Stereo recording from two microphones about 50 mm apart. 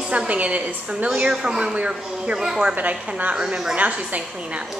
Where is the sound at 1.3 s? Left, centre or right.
Centre.